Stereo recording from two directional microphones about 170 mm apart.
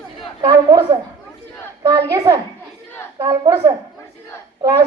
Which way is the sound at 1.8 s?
20° right (ahead or behind).